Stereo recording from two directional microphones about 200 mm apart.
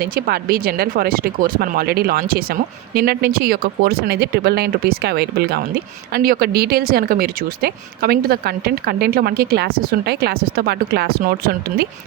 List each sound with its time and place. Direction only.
0.0 s speech: 50° right (ahead or behind)